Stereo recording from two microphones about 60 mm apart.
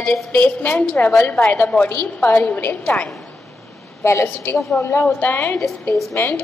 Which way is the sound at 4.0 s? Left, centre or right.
Left.